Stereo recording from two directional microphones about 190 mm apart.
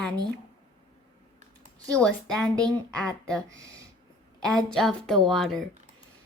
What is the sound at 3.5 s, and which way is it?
Speech, 15° right (ahead or behind).